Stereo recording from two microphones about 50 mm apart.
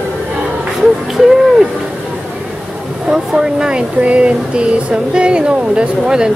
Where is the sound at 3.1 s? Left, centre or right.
Centre.